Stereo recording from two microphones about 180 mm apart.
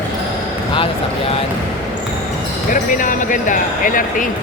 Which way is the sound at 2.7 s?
45° left (ahead or behind).